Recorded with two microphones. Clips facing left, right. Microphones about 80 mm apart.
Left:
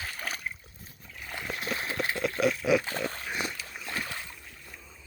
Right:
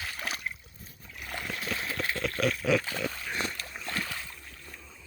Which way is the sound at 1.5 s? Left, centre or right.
Left.